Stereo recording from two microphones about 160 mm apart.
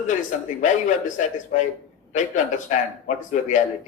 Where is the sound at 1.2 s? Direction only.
50° left (ahead or behind).